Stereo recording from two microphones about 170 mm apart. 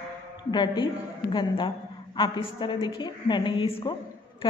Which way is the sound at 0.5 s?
25° left (ahead or behind).